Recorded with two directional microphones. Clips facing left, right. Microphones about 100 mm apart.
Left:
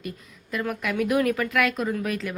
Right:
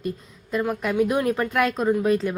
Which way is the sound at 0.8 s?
30° right (ahead or behind).